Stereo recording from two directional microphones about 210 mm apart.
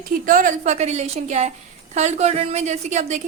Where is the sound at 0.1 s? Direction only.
40° right (ahead or behind).